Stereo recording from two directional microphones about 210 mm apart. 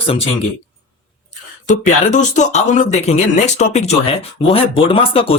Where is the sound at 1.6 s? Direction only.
35° left (ahead or behind).